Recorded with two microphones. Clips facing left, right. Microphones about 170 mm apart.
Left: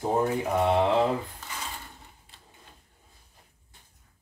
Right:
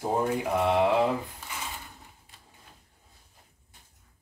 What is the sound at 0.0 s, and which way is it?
Speech, 5° right (ahead or behind).